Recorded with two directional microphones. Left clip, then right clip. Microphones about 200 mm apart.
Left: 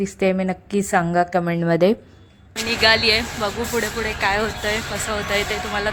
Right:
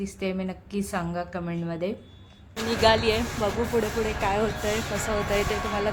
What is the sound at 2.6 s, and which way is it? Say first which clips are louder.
Speech: left 5 dB; centre (ahead or behind).